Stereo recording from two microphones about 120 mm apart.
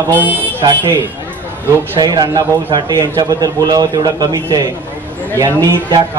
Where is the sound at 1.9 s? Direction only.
35° right (ahead or behind).